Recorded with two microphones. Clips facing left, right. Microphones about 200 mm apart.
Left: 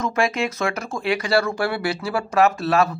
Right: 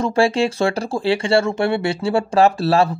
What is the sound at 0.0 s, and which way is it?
Speech, 30° right (ahead or behind).